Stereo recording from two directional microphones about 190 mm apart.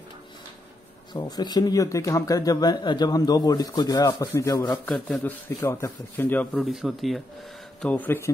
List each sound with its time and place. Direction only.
1.1 s speech: 20° left (ahead or behind)